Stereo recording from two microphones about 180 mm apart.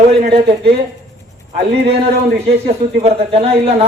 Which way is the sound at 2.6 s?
35° right (ahead or behind).